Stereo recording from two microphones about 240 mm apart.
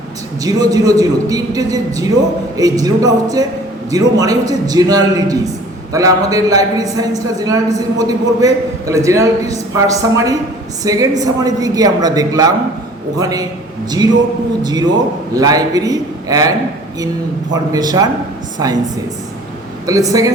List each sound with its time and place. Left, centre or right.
0.4 s a man's voice: centre
14.6 s a man's voice: centre
19.9 s a man's voice: centre